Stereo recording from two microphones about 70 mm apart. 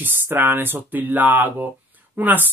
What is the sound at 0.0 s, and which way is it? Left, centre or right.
Speech, right.